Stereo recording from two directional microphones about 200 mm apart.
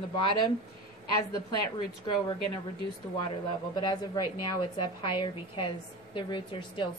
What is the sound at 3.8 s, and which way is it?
A woman's voice, 20° left (ahead or behind).